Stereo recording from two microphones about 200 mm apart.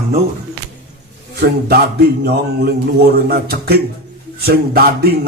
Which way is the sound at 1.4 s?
50° right (ahead or behind).